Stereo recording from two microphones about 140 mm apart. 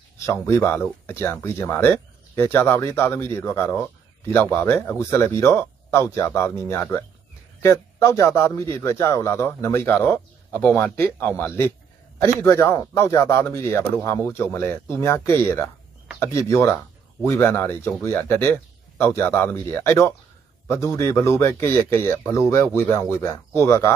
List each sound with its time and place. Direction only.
0.2 s a man's voice: 15° left (ahead or behind)